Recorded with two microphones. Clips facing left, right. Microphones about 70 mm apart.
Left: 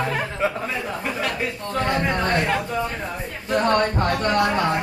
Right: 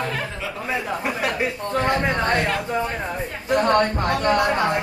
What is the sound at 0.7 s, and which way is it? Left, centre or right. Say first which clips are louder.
Speech: right 2 dB; centre.